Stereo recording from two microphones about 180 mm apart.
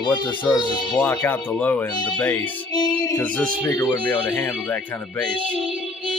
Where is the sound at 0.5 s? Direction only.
25° left (ahead or behind).